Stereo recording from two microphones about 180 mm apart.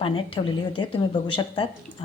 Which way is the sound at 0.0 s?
30° left (ahead or behind).